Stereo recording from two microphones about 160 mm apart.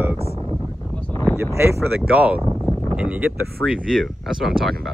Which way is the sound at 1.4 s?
15° right (ahead or behind).